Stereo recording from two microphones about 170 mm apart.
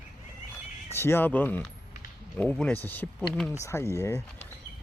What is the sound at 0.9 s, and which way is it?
Speech, 15° left (ahead or behind).